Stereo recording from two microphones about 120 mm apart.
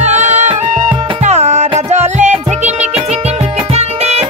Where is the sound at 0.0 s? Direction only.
70° right (ahead or behind).